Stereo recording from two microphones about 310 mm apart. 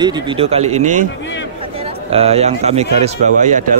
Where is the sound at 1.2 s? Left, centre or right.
Left.